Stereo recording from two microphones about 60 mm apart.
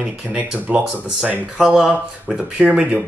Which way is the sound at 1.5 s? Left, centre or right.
Centre.